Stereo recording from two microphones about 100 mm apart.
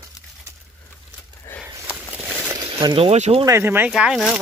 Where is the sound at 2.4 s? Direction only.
40° right (ahead or behind).